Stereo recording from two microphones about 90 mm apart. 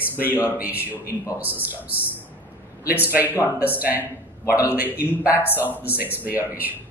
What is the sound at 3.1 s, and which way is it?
A man's voice, 20° right (ahead or behind).